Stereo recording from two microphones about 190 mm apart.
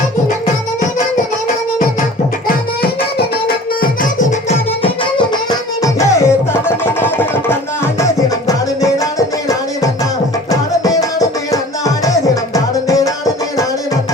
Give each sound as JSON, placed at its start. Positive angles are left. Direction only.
{"t": 0.8, "sound": "music", "side_deg": 50}
{"t": 2.8, "sound": "music", "side_deg": 55}
{"t": 10.5, "sound": "tabla", "side_deg": 15}
{"t": 11.5, "sound": "music", "side_deg": 15}